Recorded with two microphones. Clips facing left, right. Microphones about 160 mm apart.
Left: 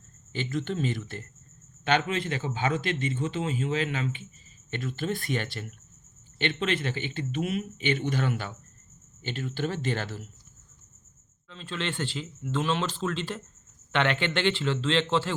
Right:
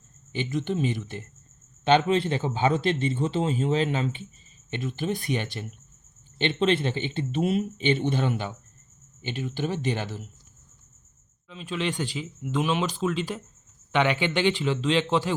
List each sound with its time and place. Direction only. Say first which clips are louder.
0.3 s a man's voice: right 3 dB; 15° right (ahead or behind); by 4.3 s 30° right (ahead or behind)
4.7 s speech: right 2 dB; 20° right (ahead or behind)
11.4 s speech: right 4 dB; 10° right (ahead or behind)